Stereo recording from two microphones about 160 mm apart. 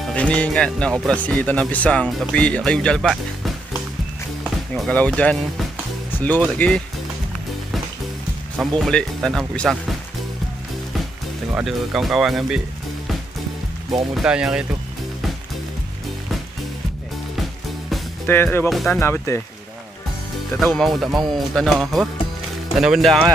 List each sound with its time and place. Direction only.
0.1 s speech: 10° left (ahead or behind)
4.7 s speech: 5° left (ahead or behind)
6.6 s speech: 10° left (ahead or behind)
8.5 s speech: centre (ahead or behind)
11.5 s speech: centre (ahead or behind)
14.1 s speech: 5° right (ahead or behind)
18.2 s speech: 15° left (ahead or behind)
18.7 s speech: centre (ahead or behind)
18.9 s speech: 15° left (ahead or behind)
20.5 s speech: centre (ahead or behind)